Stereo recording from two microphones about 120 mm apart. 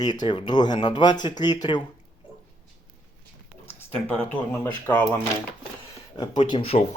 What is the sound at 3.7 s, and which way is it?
Speech, 15° left (ahead or behind).